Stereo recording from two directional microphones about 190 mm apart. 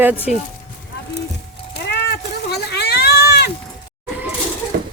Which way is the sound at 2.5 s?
60° left (ahead or behind).